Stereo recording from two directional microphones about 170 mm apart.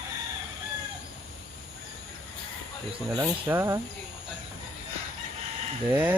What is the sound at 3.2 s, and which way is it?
Speech, 15° right (ahead or behind).